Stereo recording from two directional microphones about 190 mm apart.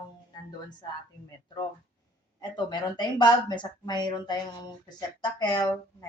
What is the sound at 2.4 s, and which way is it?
Speech, 20° left (ahead or behind).